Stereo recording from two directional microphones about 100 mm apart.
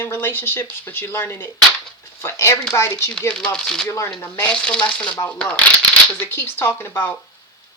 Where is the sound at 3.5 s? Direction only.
5° left (ahead or behind).